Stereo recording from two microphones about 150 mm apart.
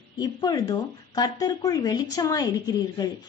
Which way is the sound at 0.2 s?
25° left (ahead or behind).